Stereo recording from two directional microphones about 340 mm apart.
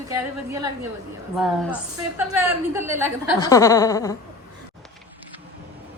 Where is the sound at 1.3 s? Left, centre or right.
Centre.